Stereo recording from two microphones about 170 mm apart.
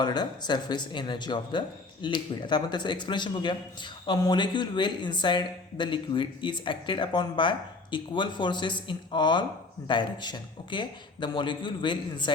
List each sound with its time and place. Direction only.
0.0 s speech: 25° left (ahead or behind)